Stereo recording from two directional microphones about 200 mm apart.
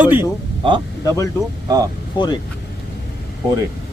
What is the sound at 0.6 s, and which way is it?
Speech, 25° right (ahead or behind).